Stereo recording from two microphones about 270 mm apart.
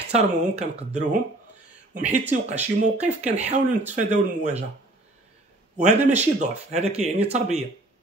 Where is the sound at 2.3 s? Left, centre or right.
Right.